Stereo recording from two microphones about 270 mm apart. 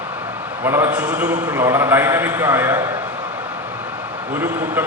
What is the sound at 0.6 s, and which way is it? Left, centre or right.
A man's voice, centre.